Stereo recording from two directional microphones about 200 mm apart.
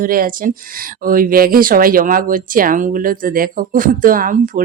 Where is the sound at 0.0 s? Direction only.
45° right (ahead or behind).